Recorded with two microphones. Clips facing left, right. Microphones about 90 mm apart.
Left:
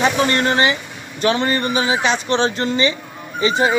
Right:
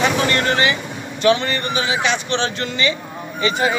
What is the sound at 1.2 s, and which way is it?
Speech, 35° left (ahead or behind).